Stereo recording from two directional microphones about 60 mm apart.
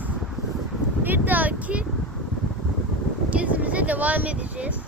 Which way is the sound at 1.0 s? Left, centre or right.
Right.